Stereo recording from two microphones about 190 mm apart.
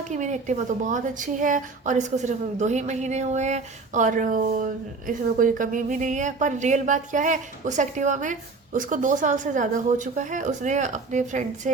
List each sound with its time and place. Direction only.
0.1 s a woman's voice: 40° right (ahead or behind)